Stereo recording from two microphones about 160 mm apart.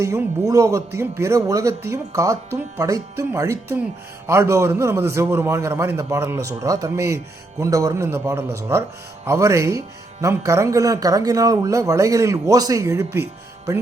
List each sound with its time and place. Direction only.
0.0 s a man's voice: 20° right (ahead or behind)